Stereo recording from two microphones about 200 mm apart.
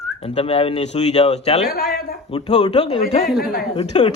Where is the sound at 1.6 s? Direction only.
50° left (ahead or behind).